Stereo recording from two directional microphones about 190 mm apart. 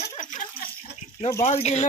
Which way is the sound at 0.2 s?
40° left (ahead or behind).